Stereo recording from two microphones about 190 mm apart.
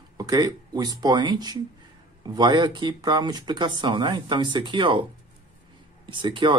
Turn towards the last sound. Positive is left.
turn(degrees=-25)  # may be behind; listen again after turning